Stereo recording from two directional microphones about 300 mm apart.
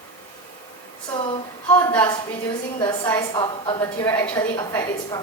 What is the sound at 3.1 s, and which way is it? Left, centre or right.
A woman's voice, centre.